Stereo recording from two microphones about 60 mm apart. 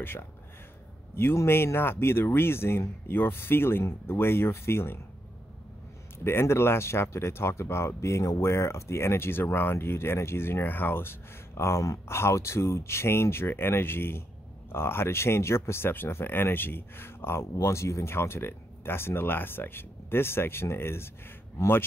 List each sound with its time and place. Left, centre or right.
0.0 s speech: left
6.1 s speech: left
12.1 s speech: left